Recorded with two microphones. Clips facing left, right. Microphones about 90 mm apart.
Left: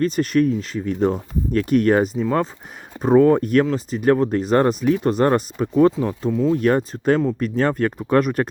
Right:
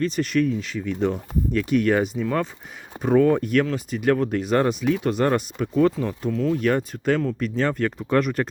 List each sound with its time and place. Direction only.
0.0 s speech: 40° left (ahead or behind)
6.0 s speech: 20° left (ahead or behind)
6.6 s speech: 35° left (ahead or behind)